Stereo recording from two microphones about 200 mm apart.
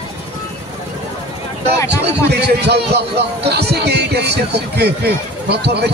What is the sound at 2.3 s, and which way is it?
Speech, 55° right (ahead or behind).